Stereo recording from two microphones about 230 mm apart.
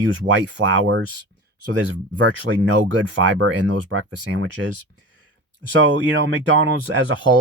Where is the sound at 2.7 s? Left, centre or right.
Right.